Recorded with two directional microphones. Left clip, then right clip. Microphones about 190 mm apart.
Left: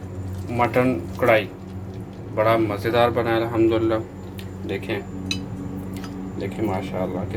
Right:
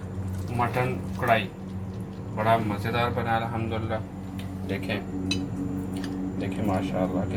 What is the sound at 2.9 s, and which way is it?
Speech, 50° left (ahead or behind).